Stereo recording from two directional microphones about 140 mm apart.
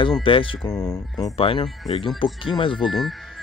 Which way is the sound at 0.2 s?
40° left (ahead or behind).